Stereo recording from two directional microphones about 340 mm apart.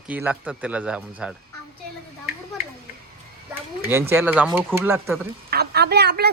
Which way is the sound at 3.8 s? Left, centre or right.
Centre.